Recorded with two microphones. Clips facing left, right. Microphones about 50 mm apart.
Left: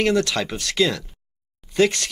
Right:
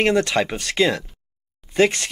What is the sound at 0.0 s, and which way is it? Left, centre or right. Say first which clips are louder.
Speech: right 2 dB; right.